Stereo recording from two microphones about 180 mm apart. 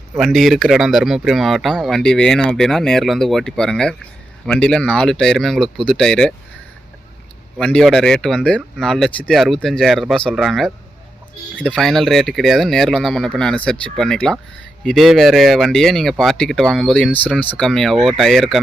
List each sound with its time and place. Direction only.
0.2 s speech: centre (ahead or behind)
7.6 s speech: 5° left (ahead or behind)